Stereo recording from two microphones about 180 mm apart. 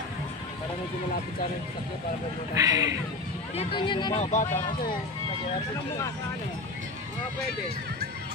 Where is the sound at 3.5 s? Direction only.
25° left (ahead or behind).